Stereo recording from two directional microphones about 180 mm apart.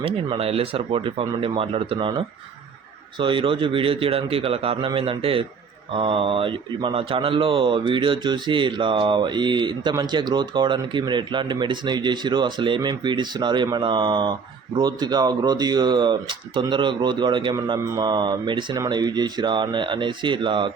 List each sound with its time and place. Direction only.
0.0 s a man's voice: 30° right (ahead or behind)